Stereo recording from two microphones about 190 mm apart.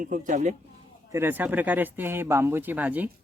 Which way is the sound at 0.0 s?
40° right (ahead or behind).